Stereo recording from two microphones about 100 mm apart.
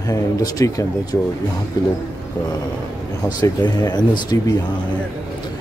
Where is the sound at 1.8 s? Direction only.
45° left (ahead or behind).